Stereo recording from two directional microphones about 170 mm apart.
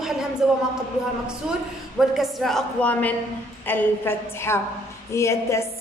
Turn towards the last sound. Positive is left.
turn(degrees=15)  # may be behind; listen again after turning